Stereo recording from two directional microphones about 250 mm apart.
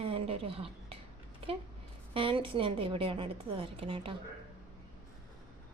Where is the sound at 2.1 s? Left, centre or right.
Right.